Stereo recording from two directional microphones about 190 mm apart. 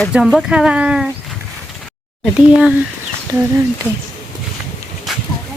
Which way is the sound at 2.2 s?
5° right (ahead or behind).